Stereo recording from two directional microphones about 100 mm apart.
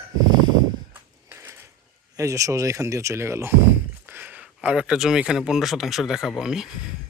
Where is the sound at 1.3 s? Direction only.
20° right (ahead or behind).